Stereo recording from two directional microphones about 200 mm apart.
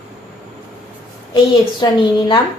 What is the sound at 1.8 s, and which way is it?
Speech, 20° left (ahead or behind).